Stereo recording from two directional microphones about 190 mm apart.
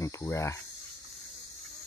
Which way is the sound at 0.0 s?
15° left (ahead or behind).